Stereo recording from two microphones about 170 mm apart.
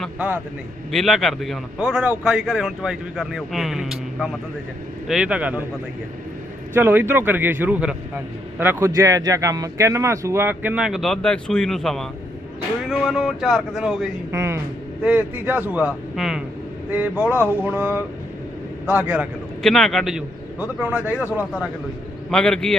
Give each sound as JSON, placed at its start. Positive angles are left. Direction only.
{"t": 0.2, "sound": "a man's voice", "side_deg": -10}
{"t": 6.7, "sound": "a man's voice", "side_deg": -10}
{"t": 14.3, "sound": "a man's voice", "side_deg": -15}
{"t": 19.6, "sound": "a man's voice", "side_deg": 0}
{"t": 22.3, "sound": "a man's voice", "side_deg": 5}